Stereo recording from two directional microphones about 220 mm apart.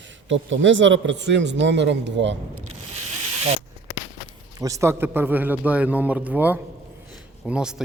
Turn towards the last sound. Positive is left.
turn(degrees=-5)  # may be behind; listen again after turning